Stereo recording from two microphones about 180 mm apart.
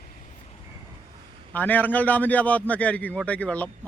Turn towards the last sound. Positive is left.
turn(degrees=5)  # may be behind; listen again after turning